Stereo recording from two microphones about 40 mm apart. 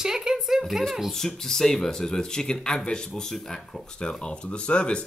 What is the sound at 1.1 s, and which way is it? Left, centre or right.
Speech, centre.